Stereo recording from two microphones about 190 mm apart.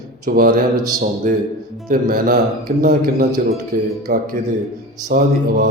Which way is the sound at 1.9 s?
50° right (ahead or behind).